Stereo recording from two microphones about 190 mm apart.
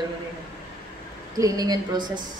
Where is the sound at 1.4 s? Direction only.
20° right (ahead or behind).